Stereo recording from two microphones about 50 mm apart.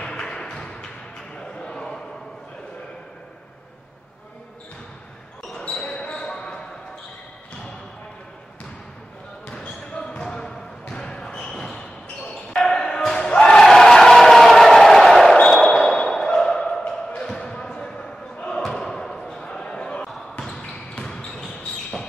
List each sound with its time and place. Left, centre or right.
0.0 s a sound: centre
5.5 s basketball bounce: centre
9.7 s basketball bounce: centre
12.6 s a sound: centre
15.4 s basketball bounce: centre
16.3 s a sound: centre
16.8 s basketball bounce: left
17.3 s slam: centre
19.4 s basketball bounce: centre